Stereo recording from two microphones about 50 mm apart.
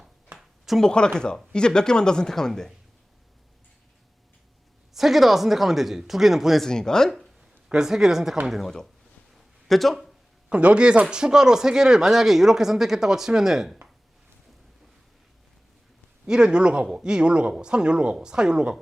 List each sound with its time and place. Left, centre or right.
0.3 s a sound: centre
0.8 s speech: centre
4.9 s speech: centre
6.6 s speech: centre
7.7 s speech: centre
9.3 s a sound: centre
10.5 s speech: right; by 13.7 s centre
16.2 s speech: centre